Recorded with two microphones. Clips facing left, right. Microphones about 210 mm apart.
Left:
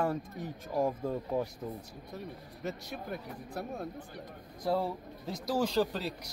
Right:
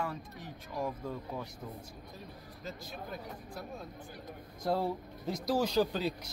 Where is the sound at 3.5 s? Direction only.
65° left (ahead or behind).